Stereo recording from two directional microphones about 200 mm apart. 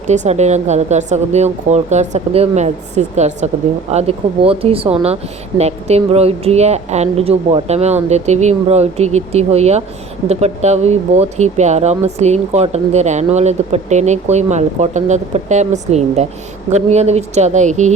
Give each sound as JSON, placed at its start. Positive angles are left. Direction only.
{"t": 0.1, "sound": "speech", "side_deg": -35}